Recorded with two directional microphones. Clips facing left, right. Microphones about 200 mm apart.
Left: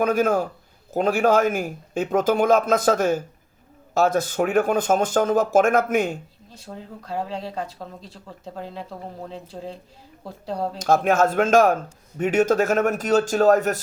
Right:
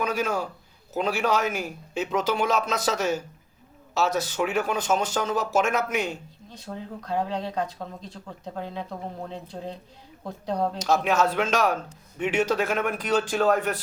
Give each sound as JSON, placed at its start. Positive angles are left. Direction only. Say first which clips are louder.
{"t": 0.0, "sound": "a man's voice", "louder": "left 7 dB", "side_deg": 50}
{"t": 6.7, "sound": "speech", "louder": "right 2 dB", "side_deg": 5}
{"t": 10.8, "sound": "a man's voice", "louder": "left 6 dB", "side_deg": 50}